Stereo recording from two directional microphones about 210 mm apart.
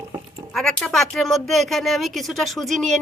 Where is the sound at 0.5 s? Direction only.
5° left (ahead or behind).